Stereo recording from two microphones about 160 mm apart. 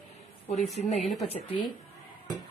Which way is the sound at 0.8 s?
45° left (ahead or behind).